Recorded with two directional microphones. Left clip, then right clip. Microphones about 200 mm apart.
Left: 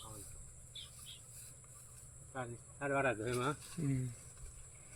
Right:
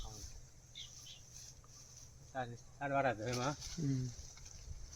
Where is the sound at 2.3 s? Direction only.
40° right (ahead or behind).